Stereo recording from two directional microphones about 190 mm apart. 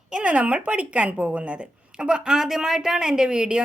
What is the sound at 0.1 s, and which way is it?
Speech, 5° right (ahead or behind).